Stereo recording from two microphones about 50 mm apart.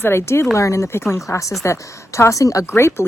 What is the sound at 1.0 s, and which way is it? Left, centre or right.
Speech, left.